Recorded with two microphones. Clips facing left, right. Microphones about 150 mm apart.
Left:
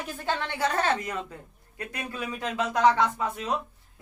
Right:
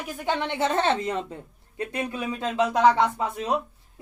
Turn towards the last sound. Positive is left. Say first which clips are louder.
# right 2 dB
turn(degrees=-25)  # may be behind; listen again after turning